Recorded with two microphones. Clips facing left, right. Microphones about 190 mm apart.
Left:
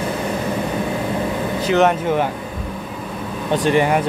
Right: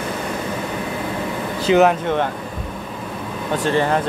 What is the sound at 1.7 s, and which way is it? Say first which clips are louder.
Speech: right 2 dB; 20° right (ahead or behind).